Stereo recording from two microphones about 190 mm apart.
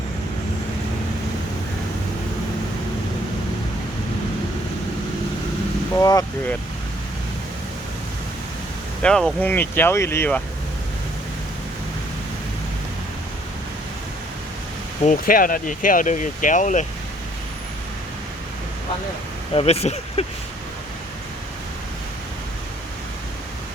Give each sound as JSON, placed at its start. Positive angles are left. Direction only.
{"t": 5.9, "sound": "speech", "side_deg": 20}
{"t": 9.0, "sound": "speech", "side_deg": 5}
{"t": 15.0, "sound": "speech", "side_deg": 45}
{"t": 19.5, "sound": "speech", "side_deg": 35}